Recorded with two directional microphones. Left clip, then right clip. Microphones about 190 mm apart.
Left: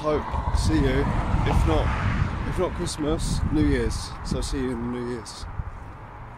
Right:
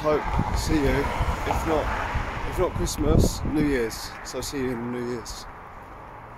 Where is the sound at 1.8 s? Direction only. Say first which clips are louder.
Right 1 dB; 30° right (ahead or behind).